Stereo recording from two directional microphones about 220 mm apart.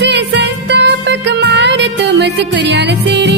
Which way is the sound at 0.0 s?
50° right (ahead or behind).